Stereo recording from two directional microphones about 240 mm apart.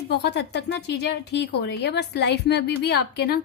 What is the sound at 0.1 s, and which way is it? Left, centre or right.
A woman's voice, left.